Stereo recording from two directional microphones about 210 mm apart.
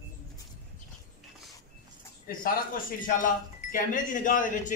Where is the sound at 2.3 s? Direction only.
45° left (ahead or behind).